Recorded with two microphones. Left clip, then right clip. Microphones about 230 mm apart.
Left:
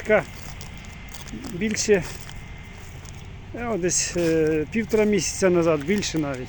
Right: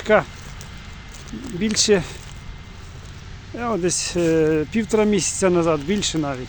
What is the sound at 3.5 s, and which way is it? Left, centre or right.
Speech, centre.